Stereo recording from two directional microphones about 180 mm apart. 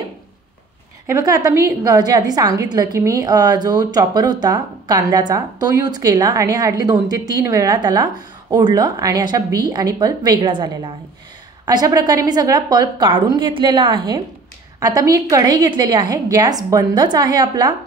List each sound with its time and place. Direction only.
1.0 s a woman's voice: 20° right (ahead or behind)